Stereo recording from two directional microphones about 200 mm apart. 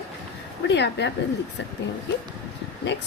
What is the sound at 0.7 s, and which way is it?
Speech, 60° left (ahead or behind).